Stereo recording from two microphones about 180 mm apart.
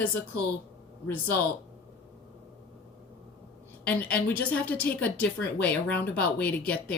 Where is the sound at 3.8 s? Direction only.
10° left (ahead or behind).